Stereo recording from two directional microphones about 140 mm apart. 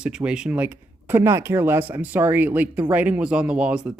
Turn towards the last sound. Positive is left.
turn(degrees=-10)  # may be behind; listen again after turning